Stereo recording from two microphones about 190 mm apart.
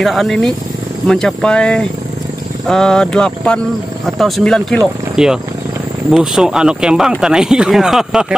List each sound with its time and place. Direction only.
0.0 s speech: centre (ahead or behind)